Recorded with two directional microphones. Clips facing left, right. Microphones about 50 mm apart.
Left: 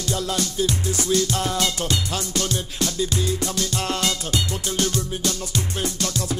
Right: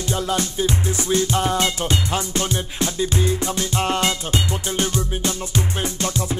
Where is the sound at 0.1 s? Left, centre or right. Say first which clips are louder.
Right 2 dB; right.